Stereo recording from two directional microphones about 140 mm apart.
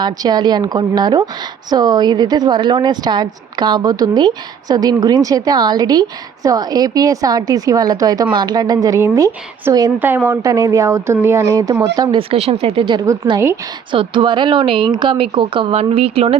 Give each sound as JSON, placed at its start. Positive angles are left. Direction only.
{"t": 0.0, "sound": "a woman's voice", "side_deg": -30}
{"t": 10.0, "sound": "a woman's voice", "side_deg": -15}
{"t": 12.1, "sound": "speech", "side_deg": -45}
{"t": 12.8, "sound": "a woman's voice", "side_deg": -30}
{"t": 13.9, "sound": "speech", "side_deg": -35}